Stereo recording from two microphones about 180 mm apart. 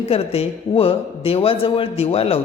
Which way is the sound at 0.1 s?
35° left (ahead or behind).